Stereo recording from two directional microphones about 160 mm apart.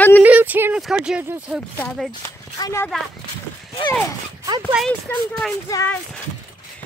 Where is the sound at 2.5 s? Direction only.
25° left (ahead or behind).